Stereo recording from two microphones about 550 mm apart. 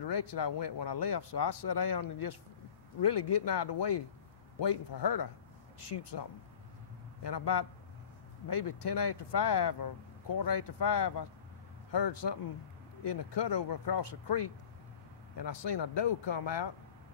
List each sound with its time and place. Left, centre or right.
0.0 s a man's voice: left
7.2 s speech: left